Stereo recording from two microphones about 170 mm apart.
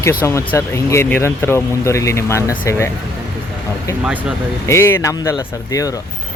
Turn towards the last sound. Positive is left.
turn(degrees=20)  # may be behind; listen again after turning